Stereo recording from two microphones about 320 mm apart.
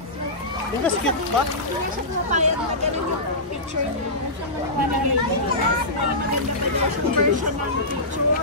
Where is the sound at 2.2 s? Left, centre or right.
Right.